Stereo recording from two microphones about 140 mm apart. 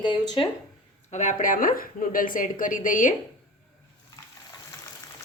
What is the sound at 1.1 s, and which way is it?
A woman's voice, 60° left (ahead or behind).